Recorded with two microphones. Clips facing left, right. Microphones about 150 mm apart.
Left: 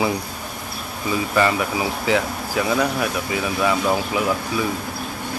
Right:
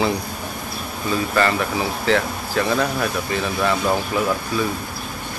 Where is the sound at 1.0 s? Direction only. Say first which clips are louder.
Even; 15° left (ahead or behind).